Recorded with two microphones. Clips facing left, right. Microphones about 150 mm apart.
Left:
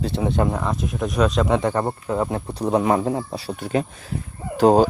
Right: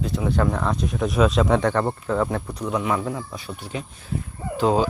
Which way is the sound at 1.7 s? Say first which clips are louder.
Even; 15° left (ahead or behind).